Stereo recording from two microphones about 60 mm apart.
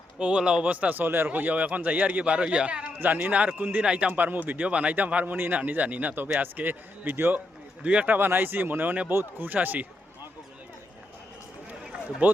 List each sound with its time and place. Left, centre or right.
0.2 s speech: centre
3.8 s speech: centre
4.1 s speech: right
12.2 s speech: right